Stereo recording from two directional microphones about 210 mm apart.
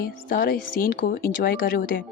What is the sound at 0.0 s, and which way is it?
Speech, 45° left (ahead or behind).